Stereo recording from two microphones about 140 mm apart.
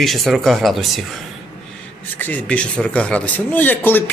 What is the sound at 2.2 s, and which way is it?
Speech, 10° left (ahead or behind).